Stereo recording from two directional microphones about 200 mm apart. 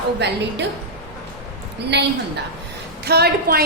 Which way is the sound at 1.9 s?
60° right (ahead or behind).